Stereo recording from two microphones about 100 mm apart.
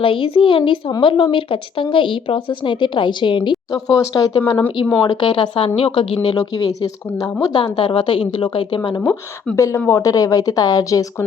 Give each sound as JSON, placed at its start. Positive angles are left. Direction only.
{"t": 0.0, "sound": "speech", "side_deg": 60}
{"t": 6.2, "sound": "a woman's voice", "side_deg": 40}
{"t": 7.4, "sound": "speech", "side_deg": 55}
{"t": 9.0, "sound": "a woman's voice", "side_deg": 15}
{"t": 9.6, "sound": "a woman's voice", "side_deg": 30}